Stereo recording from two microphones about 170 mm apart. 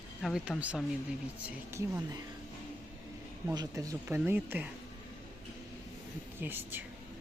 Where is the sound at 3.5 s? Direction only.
20° right (ahead or behind).